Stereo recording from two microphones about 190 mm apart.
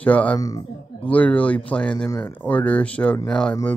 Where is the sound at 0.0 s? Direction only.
5° left (ahead or behind).